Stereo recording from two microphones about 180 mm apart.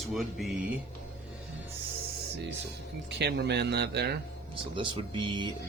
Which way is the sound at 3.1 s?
70° right (ahead or behind).